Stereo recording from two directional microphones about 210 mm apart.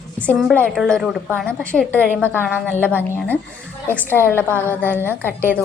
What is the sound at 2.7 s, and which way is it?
Speech, 10° left (ahead or behind).